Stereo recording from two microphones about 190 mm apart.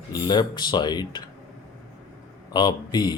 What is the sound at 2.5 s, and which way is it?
Speech, 20° left (ahead or behind).